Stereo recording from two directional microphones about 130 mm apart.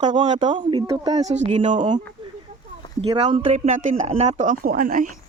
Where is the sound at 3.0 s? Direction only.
45° right (ahead or behind).